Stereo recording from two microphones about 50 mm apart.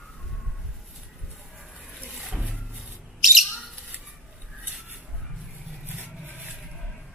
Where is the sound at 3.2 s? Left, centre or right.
Centre.